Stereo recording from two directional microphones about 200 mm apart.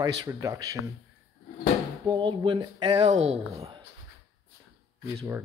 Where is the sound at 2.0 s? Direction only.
25° right (ahead or behind).